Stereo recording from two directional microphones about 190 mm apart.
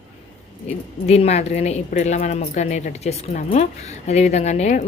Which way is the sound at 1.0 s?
35° left (ahead or behind).